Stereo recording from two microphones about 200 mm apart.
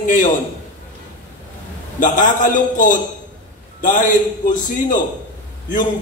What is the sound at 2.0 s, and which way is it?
A man's voice, 40° left (ahead or behind).